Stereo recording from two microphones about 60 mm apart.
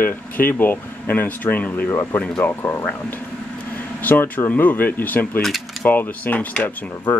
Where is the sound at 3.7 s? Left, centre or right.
Left.